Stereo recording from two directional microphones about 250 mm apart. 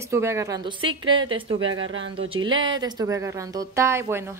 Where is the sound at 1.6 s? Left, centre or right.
Right.